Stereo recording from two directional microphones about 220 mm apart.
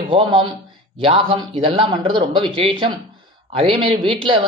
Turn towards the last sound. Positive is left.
turn(degrees=-25)  # may be behind; listen again after turning